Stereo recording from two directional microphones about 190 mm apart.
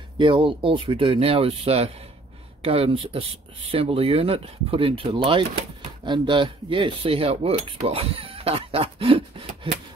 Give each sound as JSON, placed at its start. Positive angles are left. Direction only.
{"t": 0.2, "sound": "speech", "side_deg": -25}